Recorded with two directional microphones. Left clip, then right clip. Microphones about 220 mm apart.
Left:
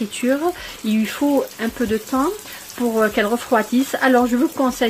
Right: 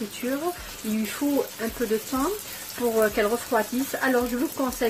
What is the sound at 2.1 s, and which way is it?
Speech, 30° left (ahead or behind).